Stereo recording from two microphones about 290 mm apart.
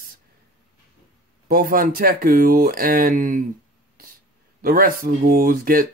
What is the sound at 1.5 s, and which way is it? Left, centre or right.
Speech, right.